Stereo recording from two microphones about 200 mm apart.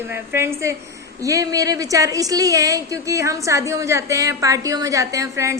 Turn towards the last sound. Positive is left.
turn(degrees=-15)  # may be behind; listen again after turning